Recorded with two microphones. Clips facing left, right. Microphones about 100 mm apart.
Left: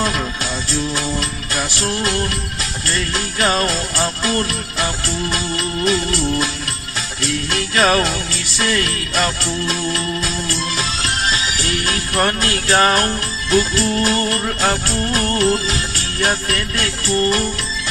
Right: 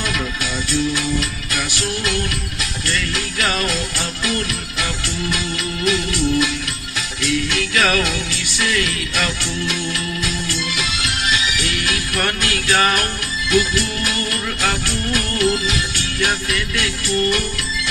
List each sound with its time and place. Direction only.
0.0 s music: 35° left (ahead or behind)